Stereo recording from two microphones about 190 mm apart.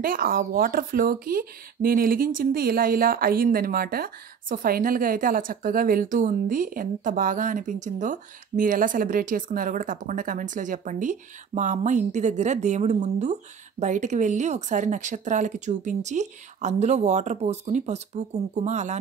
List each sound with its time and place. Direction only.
0.0 s speech: 50° right (ahead or behind)